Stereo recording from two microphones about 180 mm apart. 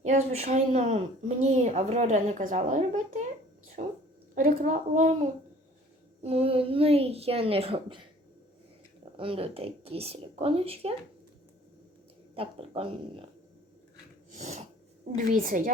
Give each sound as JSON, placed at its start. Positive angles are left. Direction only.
{"t": 0.0, "sound": "a woman's voice", "side_deg": -40}
{"t": 9.1, "sound": "a woman's voice", "side_deg": -30}
{"t": 12.3, "sound": "a woman's voice", "side_deg": -30}
{"t": 14.3, "sound": "snort", "side_deg": -40}
{"t": 15.4, "sound": "a woman's voice", "side_deg": -50}